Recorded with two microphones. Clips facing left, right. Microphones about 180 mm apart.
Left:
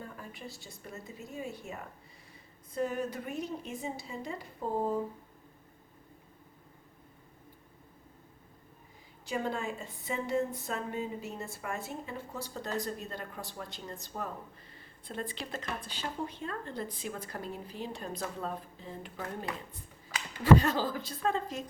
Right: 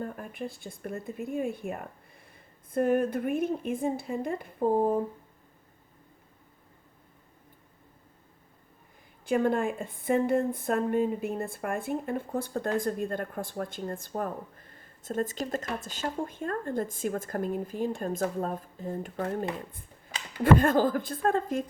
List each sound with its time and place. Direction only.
0.0 s a woman's voice: 55° right (ahead or behind)
9.2 s speech: 55° right (ahead or behind)